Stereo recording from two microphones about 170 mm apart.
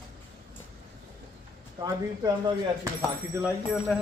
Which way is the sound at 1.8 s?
20° right (ahead or behind).